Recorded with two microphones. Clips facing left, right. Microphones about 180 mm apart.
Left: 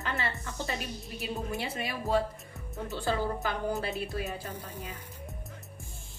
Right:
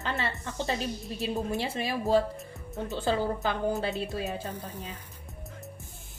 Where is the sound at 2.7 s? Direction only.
20° right (ahead or behind).